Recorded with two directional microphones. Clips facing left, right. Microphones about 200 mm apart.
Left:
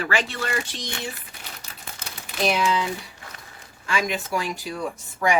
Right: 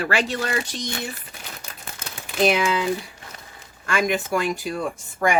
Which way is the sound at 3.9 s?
50° right (ahead or behind).